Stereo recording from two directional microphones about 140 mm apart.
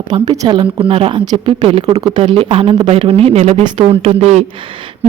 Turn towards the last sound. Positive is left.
turn(degrees=-50)  # may be behind; listen again after turning